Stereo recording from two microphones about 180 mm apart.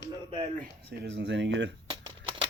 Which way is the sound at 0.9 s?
80° right.